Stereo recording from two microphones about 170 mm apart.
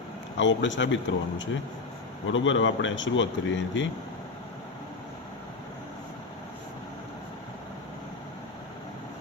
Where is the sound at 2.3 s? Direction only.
90° left.